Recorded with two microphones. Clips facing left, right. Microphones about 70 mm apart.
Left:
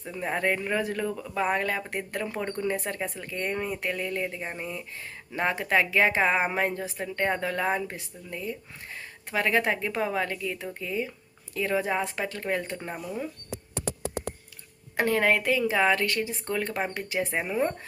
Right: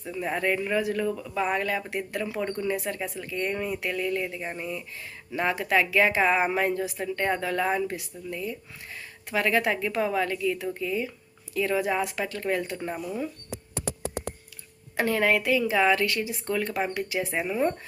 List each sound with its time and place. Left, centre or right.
0.0 s speech: left
4.4 s speech: centre
14.9 s speech: left